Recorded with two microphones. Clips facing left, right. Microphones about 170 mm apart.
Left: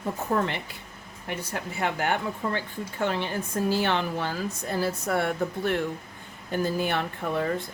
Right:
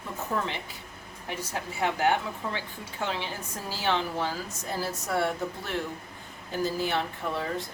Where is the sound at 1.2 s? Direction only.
60° left (ahead or behind).